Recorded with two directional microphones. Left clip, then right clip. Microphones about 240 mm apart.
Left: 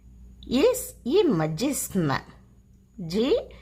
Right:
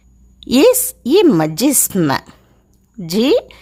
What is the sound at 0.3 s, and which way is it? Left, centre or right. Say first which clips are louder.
A woman's voice: right 11 dB; right.